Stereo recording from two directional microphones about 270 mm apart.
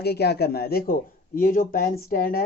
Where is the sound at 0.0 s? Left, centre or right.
Left.